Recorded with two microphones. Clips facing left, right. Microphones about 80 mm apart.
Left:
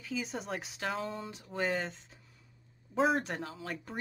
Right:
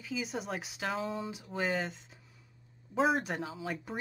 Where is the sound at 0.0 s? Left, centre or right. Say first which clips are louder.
Right 1 dB; centre.